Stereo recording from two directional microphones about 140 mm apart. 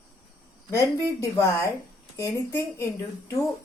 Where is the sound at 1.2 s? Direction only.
20° left (ahead or behind).